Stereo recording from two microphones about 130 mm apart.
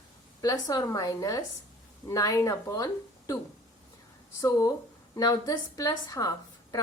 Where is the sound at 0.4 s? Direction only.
30° left (ahead or behind).